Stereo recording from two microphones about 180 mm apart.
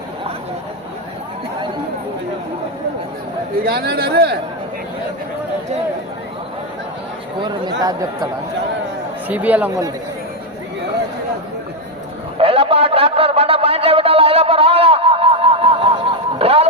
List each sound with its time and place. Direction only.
3.6 s speech: 60° right (ahead or behind)
7.3 s speech: 25° right (ahead or behind)
9.3 s speech: 10° right (ahead or behind)
12.4 s a sound: 30° right (ahead or behind)
16.4 s music: 30° right (ahead or behind)